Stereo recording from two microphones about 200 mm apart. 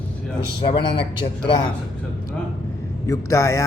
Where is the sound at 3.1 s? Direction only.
15° left (ahead or behind).